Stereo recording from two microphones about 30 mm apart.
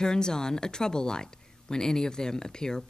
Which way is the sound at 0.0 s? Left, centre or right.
Left.